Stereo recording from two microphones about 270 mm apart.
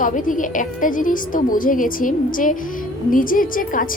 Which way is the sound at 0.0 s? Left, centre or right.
Left.